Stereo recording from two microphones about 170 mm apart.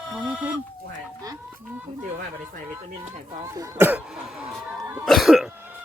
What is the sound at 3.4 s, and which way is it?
Speech, 15° right (ahead or behind).